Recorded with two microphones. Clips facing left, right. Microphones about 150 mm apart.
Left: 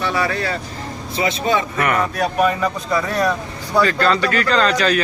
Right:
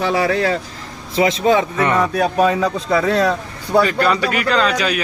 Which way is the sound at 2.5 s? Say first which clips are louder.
Right 3 dB; 80° right.